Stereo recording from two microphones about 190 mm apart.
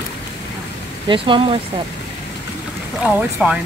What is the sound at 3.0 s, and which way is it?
Speech, 5° right (ahead or behind).